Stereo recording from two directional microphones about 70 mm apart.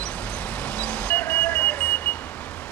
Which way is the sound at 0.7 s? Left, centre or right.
Centre.